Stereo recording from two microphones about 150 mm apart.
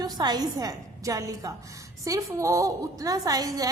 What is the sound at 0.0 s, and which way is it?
A woman's voice, 25° right (ahead or behind).